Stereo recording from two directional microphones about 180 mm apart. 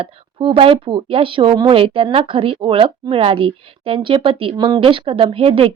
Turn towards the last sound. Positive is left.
turn(degrees=-30)  # may be behind; listen again after turning